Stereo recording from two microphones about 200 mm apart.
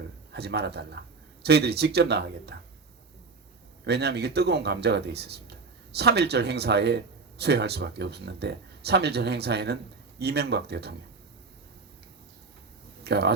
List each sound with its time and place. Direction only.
0.3 s speech: 55° right (ahead or behind)
3.8 s speech: 55° right (ahead or behind)
13.1 s speech: 55° right (ahead or behind)